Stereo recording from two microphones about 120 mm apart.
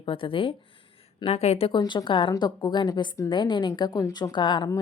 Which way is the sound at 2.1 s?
45° left (ahead or behind).